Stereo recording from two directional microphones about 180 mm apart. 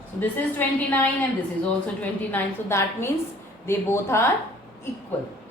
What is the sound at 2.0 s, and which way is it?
A woman's voice, 10° left (ahead or behind).